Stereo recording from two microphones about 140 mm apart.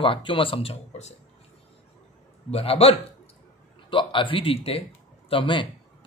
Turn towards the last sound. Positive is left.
turn(degrees=35)  # may be behind; listen again after turning